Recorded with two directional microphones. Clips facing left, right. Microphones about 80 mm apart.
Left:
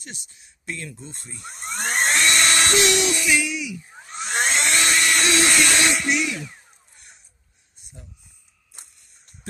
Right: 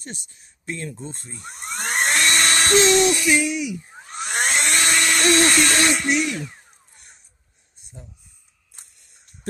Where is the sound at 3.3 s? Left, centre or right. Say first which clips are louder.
Right 3 dB; right.